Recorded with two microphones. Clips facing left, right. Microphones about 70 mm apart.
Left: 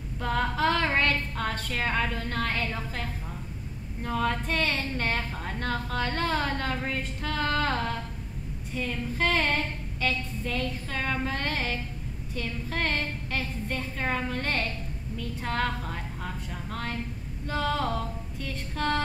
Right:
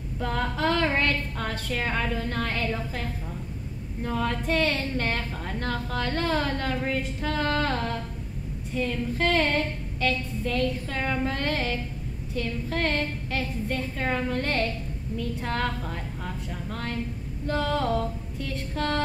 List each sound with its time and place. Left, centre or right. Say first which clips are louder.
0.2 s a woman's voice: left 1 dB; centre